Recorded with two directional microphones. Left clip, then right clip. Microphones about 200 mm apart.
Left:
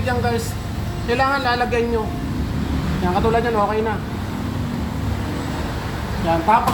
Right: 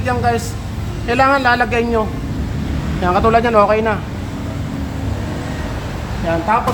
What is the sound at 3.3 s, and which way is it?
Speech, 30° right (ahead or behind).